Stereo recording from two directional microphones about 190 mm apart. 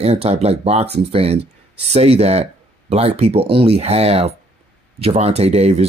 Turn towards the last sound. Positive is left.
turn(degrees=-35)  # may be behind; listen again after turning